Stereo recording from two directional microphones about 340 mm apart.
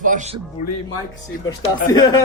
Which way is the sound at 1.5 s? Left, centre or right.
Centre.